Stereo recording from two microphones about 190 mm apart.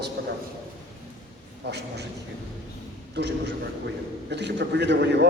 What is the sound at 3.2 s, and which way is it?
A man's voice, 65° right (ahead or behind).